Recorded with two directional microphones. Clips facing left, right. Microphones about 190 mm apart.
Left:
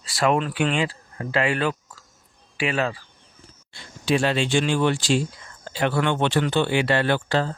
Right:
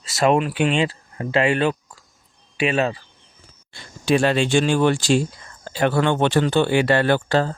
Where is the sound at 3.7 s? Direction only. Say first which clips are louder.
Right 3 dB; 50° right (ahead or behind).